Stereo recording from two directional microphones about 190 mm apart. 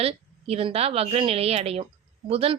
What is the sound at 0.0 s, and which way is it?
A woman's voice, 35° right (ahead or behind).